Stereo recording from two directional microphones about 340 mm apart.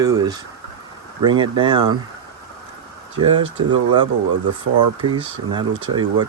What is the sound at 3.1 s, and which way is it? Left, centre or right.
Speech, centre.